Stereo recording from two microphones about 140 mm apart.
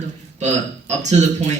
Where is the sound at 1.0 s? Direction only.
55° right (ahead or behind).